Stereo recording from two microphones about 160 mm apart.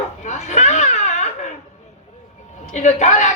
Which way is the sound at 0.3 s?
45° left (ahead or behind).